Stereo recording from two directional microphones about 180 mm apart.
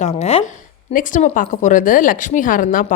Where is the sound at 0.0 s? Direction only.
35° left (ahead or behind).